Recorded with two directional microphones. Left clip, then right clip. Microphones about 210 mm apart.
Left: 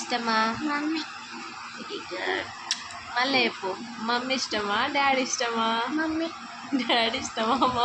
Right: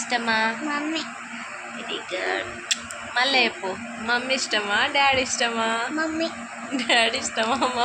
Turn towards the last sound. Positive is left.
turn(degrees=10)  # may be behind; listen again after turning